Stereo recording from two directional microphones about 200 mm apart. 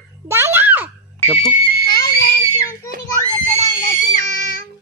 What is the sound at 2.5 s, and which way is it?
Children playing, 15° left (ahead or behind).